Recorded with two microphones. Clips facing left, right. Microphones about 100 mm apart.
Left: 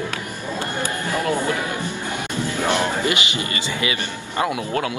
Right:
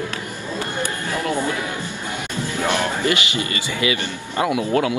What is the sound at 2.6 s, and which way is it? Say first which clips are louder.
Speech: even; 20° left (ahead or behind).